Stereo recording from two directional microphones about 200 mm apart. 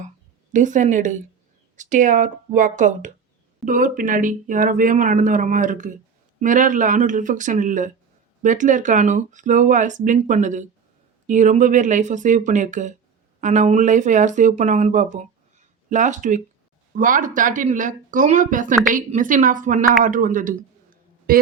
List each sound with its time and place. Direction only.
0.5 s a man's voice: 40° right (ahead or behind)